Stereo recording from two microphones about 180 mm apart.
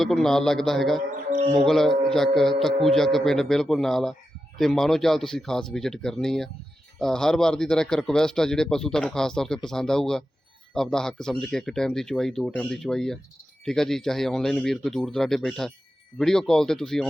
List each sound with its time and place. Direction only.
0.0 s a man's voice: centre (ahead or behind)